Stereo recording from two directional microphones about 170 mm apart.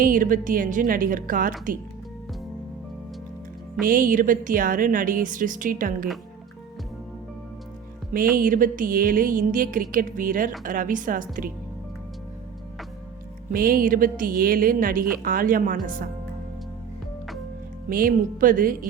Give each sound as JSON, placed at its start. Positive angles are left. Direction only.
{"t": 0.0, "sound": "music", "side_deg": -55}
{"t": 3.8, "sound": "music", "side_deg": -55}
{"t": 8.1, "sound": "music", "side_deg": -55}
{"t": 13.5, "sound": "a woman's voice", "side_deg": -55}
{"t": 17.8, "sound": "a woman's voice", "side_deg": -55}